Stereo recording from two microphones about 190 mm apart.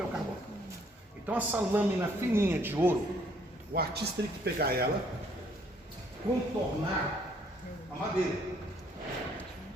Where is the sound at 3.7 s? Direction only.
55° right (ahead or behind).